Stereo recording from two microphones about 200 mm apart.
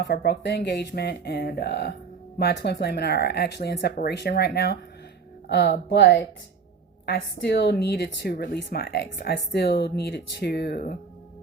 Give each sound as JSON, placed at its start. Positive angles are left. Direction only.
{"t": 0.0, "sound": "a woman's voice", "side_deg": 55}